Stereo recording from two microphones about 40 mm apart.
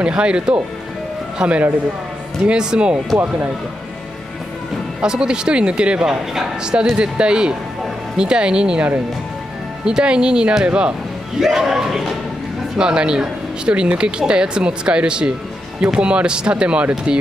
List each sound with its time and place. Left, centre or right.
0.0 s speech: right
5.0 s speech: centre
11.3 s speech: centre
12.7 s speech: right